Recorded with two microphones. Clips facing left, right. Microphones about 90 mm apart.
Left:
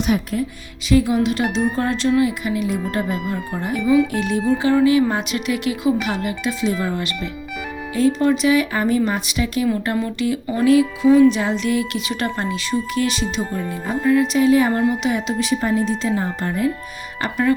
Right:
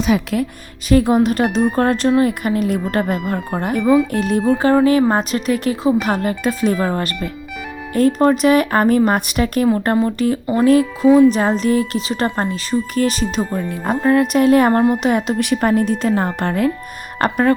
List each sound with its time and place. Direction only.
0.9 s a woman's voice: 50° right (ahead or behind); by 16.7 s 65° right (ahead or behind)
17.2 s speech: 50° right (ahead or behind)